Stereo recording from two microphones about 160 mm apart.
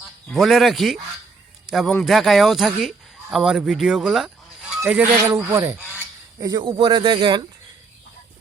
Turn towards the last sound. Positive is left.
turn(degrees=-30)  # may be behind; listen again after turning